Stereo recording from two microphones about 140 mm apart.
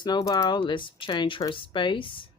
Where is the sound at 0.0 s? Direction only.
30° left (ahead or behind).